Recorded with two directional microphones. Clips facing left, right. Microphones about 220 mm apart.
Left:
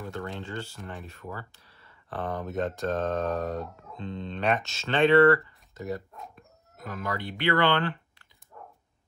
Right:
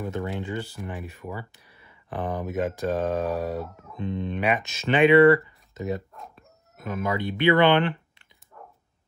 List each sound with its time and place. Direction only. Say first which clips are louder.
0.0 s speech: right 5 dB; 15° right (ahead or behind)
3.9 s speech: right 7 dB; 15° right (ahead or behind)